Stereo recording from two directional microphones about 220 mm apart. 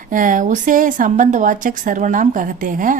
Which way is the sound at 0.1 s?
35° right (ahead or behind).